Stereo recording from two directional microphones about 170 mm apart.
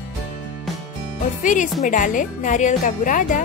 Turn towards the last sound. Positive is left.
turn(degrees=50)  # may be behind; listen again after turning